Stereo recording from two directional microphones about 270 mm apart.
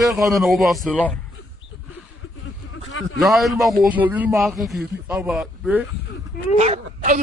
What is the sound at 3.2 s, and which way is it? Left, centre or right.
A man's voice, centre.